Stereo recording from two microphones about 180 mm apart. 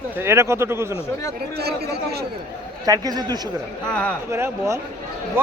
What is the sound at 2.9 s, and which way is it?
Speech, 20° right (ahead or behind).